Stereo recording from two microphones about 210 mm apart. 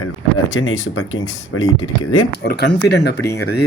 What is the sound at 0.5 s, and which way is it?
Speech, 70° left (ahead or behind).